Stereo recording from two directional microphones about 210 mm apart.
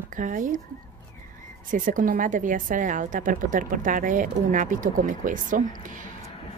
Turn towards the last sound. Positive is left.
turn(degrees=-35)  # may be behind; listen again after turning